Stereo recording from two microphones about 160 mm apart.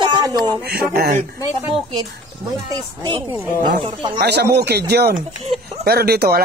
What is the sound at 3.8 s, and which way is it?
Speech, 30° right (ahead or behind).